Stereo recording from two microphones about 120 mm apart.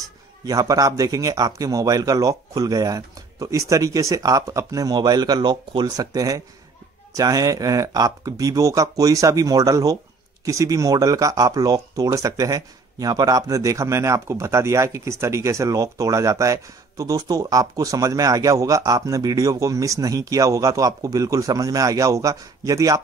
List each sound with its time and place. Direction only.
0.5 s speech: 30° right (ahead or behind)